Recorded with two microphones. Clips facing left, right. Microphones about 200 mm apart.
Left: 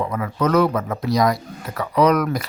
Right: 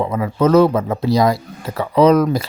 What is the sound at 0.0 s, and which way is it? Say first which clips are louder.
Speech: right 5 dB; 25° right (ahead or behind).